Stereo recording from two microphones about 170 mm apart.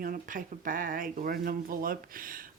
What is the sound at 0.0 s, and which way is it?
Speech, 55° right (ahead or behind).